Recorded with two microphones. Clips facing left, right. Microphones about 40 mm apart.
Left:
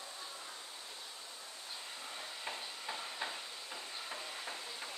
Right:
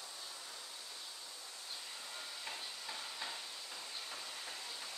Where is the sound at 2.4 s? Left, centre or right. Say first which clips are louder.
Left 4 dB; left.